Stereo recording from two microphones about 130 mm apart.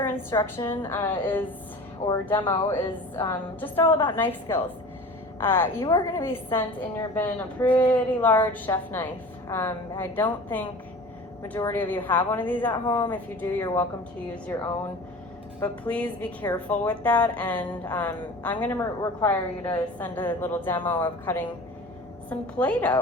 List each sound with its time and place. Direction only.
0.0 s a sound: 15° left (ahead or behind)
0.5 s a woman's voice: 15° left (ahead or behind)
2.0 s speech: 55° left (ahead or behind)
2.4 s a woman's voice: 15° left (ahead or behind)
15.6 s a woman's voice: 10° left (ahead or behind)